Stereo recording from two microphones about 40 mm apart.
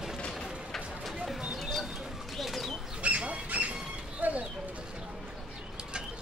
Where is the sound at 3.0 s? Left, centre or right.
Right.